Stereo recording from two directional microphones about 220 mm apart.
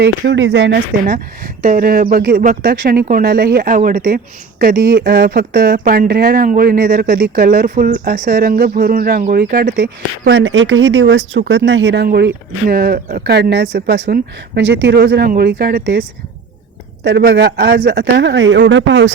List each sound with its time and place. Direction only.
0.0 s speech: 55° right (ahead or behind)
1.6 s speech: 40° right (ahead or behind)